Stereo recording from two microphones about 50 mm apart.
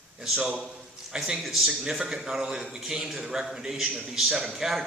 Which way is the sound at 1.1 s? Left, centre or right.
Centre.